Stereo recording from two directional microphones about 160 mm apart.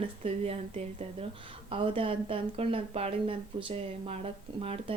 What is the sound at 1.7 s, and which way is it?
Speech, 35° right (ahead or behind).